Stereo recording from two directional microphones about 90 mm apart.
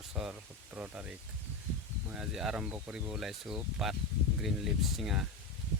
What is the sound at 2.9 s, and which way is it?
Speech, 5° right (ahead or behind).